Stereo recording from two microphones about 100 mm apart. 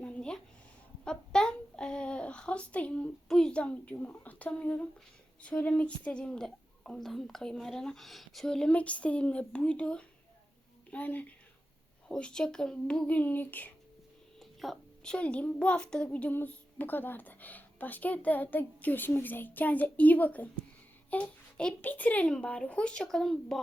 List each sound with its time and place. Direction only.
0.0 s a sound: 10° left (ahead or behind)
1.0 s a child's voice: 10° left (ahead or behind)
14.3 s a child's voice: centre (ahead or behind)